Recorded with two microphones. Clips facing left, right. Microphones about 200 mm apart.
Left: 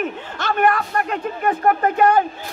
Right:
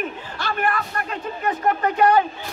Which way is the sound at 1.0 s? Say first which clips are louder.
Left 4 dB; 55° left (ahead or behind).